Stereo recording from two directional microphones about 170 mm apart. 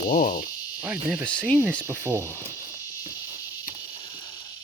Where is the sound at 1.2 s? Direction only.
5° left (ahead or behind).